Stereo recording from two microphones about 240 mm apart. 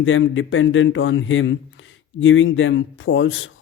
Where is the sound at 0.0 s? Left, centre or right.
Left.